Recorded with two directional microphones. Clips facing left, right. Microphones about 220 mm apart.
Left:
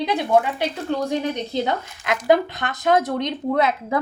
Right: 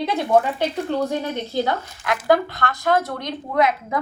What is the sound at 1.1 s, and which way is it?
A woman's voice, 20° left (ahead or behind).